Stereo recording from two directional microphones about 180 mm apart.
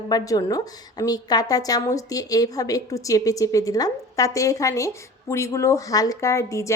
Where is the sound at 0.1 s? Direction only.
20° left (ahead or behind).